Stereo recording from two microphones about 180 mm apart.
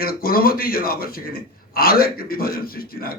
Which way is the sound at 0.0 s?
55° left (ahead or behind).